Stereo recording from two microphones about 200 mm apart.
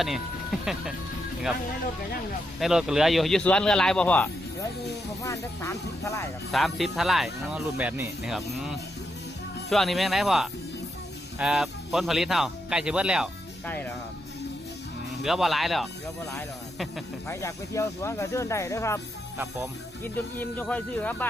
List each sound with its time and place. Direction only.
0.0 s speech: centre (ahead or behind)
2.6 s speech: centre (ahead or behind); by 6.2 s 15° left (ahead or behind)
6.5 s speech: centre (ahead or behind)
13.7 s speech: 10° left (ahead or behind)
15.2 s speech: centre (ahead or behind)
17.2 s speech: 15° left (ahead or behind)
20.4 s speech: 10° left (ahead or behind)